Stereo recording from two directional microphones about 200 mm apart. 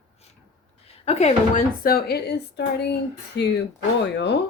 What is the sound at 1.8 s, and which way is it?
Speech, 50° left (ahead or behind).